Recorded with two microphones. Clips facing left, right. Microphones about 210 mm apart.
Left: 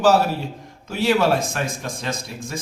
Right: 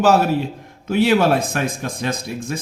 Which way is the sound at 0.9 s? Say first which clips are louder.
Right 3 dB; 55° right (ahead or behind).